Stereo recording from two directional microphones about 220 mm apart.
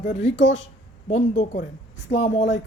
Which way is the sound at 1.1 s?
35° left (ahead or behind).